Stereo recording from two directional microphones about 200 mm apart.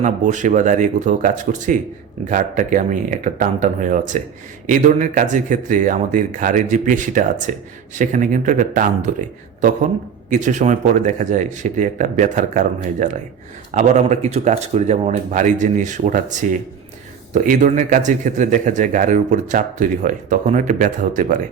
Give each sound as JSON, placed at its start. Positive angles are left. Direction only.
{"t": 0.0, "sound": "speech", "side_deg": -40}
{"t": 10.2, "sound": "speech", "side_deg": -40}